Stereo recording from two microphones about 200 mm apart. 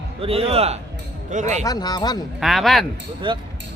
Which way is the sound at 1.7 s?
20° left (ahead or behind).